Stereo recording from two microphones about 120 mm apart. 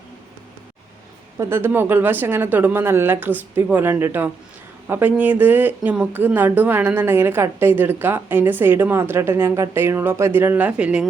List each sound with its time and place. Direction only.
1.4 s a woman's voice: 20° right (ahead or behind)